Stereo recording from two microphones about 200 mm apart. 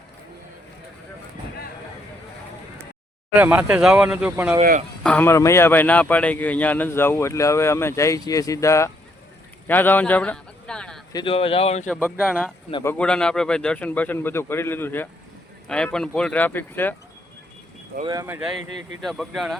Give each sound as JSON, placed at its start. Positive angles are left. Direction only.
{"t": 3.3, "sound": "speech", "side_deg": -10}
{"t": 5.0, "sound": "a man's voice", "side_deg": 10}
{"t": 11.1, "sound": "speech", "side_deg": 25}
{"t": 11.9, "sound": "a man's voice", "side_deg": 5}
{"t": 18.0, "sound": "speech", "side_deg": -15}
{"t": 19.0, "sound": "speech", "side_deg": 0}